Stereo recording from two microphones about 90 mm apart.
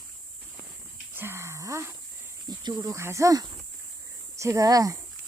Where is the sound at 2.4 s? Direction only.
45° right (ahead or behind).